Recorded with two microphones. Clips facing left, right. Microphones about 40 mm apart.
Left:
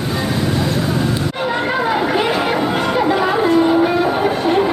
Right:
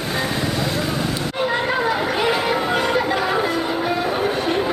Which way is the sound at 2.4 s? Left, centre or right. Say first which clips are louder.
Left 3 dB; centre.